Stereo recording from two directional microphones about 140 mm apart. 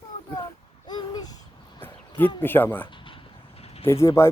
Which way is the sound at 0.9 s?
30° left (ahead or behind).